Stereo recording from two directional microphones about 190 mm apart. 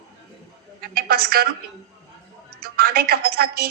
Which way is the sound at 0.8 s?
55° right (ahead or behind).